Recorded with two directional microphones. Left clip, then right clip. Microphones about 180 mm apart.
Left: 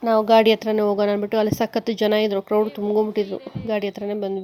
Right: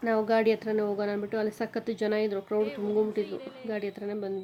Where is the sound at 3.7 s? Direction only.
40° left (ahead or behind).